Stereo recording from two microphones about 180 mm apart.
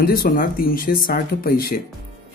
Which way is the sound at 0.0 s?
55° left (ahead or behind).